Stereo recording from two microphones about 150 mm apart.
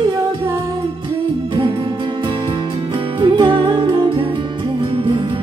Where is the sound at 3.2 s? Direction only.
30° right (ahead or behind).